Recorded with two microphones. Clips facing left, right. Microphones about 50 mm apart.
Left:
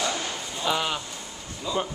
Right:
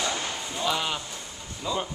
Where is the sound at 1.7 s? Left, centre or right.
Centre.